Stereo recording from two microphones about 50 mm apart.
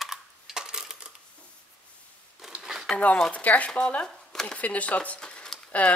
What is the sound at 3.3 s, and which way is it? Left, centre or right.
Speech, left.